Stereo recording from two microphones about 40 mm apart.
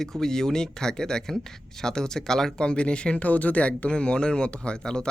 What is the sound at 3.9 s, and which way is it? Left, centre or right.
Speech, left.